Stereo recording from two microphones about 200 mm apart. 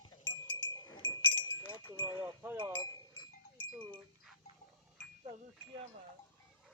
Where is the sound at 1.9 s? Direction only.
25° right (ahead or behind).